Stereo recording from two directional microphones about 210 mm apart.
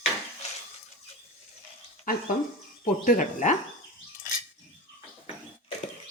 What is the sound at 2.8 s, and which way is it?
Speech, 40° left (ahead or behind).